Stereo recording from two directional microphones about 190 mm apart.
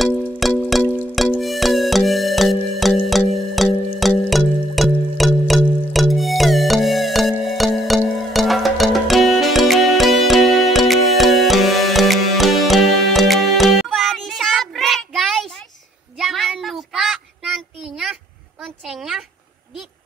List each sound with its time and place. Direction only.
0.0 s music: 5° left (ahead or behind)
16.2 s child singing: centre (ahead or behind)
18.6 s a sound: centre (ahead or behind)